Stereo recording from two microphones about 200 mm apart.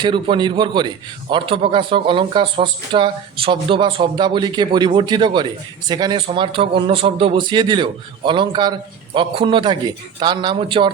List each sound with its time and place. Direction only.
0.0 s a man's voice: 25° right (ahead or behind)